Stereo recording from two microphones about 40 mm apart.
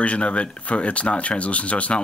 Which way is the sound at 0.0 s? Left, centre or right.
Left.